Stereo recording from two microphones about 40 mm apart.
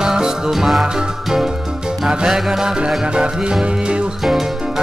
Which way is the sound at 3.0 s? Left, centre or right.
Right.